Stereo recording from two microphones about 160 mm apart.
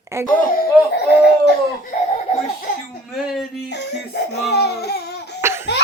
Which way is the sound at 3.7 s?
90° left.